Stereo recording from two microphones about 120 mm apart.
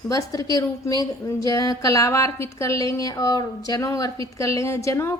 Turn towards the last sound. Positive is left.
turn(degrees=25)  # may be behind; listen again after turning